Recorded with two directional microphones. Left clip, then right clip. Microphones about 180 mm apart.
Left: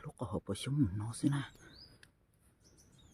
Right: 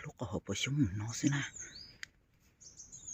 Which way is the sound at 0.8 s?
5° left (ahead or behind).